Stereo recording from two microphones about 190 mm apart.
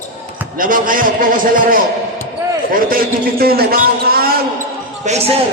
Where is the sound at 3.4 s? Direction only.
50° right (ahead or behind).